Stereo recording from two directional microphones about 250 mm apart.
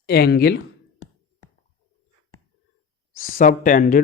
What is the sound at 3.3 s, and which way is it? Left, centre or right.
Speech, left.